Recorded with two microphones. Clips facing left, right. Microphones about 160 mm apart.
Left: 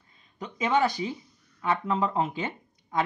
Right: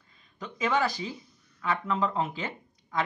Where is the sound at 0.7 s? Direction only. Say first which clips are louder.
Left 3 dB; 25° left (ahead or behind).